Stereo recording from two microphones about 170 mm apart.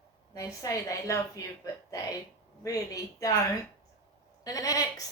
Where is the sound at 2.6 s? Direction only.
20° left (ahead or behind).